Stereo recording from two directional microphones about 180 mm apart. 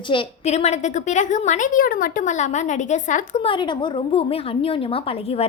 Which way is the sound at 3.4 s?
25° left (ahead or behind).